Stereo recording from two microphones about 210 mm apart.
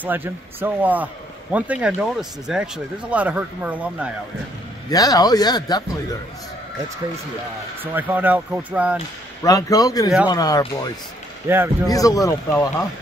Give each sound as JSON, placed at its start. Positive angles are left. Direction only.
{"t": 0.0, "sound": "speech", "side_deg": -10}
{"t": 4.8, "sound": "speech", "side_deg": 15}
{"t": 7.8, "sound": "speech", "side_deg": -10}
{"t": 9.4, "sound": "speech", "side_deg": 15}
{"t": 11.4, "sound": "speech", "side_deg": -10}
{"t": 11.9, "sound": "speech", "side_deg": 15}